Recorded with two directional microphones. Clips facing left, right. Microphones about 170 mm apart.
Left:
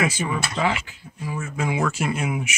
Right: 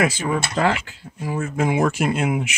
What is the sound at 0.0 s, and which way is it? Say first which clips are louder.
Speech: right 3 dB; 60° right (ahead or behind).